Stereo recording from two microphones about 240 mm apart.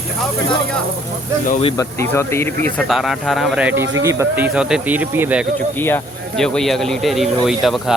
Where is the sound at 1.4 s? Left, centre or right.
Left.